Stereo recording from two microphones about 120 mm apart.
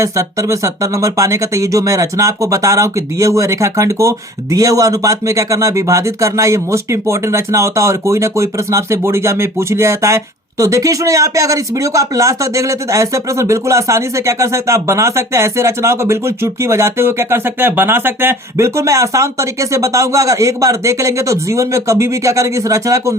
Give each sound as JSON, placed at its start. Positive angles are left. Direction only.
{"t": 0.0, "sound": "speech", "side_deg": -25}